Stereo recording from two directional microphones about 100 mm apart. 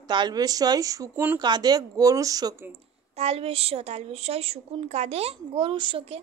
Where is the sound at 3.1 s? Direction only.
90° right.